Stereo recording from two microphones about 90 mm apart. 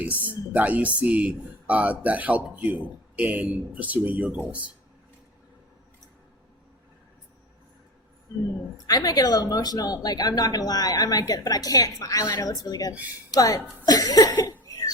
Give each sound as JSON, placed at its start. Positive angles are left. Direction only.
{"t": 0.0, "sound": "speech", "side_deg": -15}
{"t": 8.3, "sound": "speech", "side_deg": 40}
{"t": 14.4, "sound": "a sound", "side_deg": 40}